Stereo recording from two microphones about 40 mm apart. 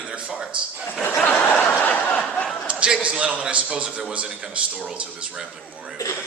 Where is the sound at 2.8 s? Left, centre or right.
Right.